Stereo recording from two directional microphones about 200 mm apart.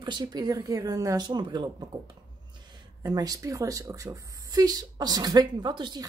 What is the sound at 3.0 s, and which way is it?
A woman's voice, 20° right (ahead or behind).